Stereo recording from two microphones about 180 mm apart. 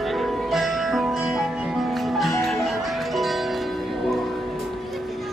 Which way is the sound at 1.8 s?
Centre (ahead or behind).